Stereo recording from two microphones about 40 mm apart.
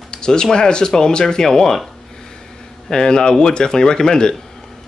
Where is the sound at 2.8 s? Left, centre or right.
Centre.